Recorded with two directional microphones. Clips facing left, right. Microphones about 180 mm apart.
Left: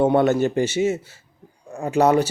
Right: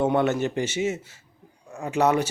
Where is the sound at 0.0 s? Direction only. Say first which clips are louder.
Left 5 dB; 35° left (ahead or behind).